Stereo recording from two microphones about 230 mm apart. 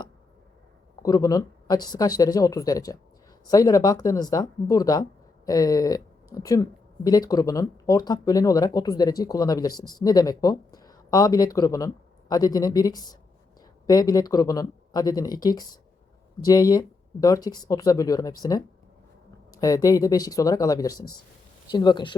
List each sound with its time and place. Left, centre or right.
1.0 s speech: centre
19.5 s speech: centre